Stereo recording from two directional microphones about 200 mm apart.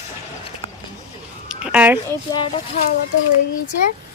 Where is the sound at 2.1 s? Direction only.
20° left (ahead or behind).